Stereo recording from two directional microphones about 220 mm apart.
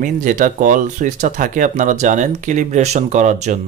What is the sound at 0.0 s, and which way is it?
Speech, 35° right (ahead or behind).